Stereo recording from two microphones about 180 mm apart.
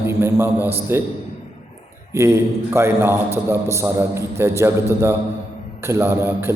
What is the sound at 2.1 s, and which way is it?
A man's voice, 15° right (ahead or behind).